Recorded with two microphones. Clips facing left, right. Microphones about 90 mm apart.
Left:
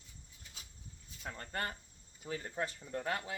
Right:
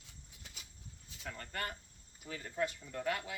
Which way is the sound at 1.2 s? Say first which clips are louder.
Left 2 dB; 30° left (ahead or behind).